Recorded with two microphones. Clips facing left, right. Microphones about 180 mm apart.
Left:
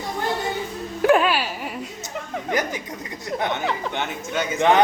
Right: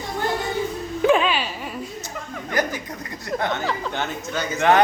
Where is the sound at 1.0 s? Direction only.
5° left (ahead or behind).